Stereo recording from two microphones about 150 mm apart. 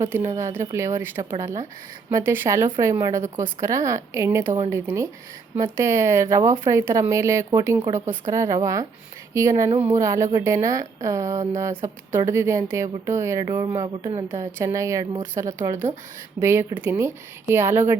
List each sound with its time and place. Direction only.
0.0 s speech: 20° right (ahead or behind)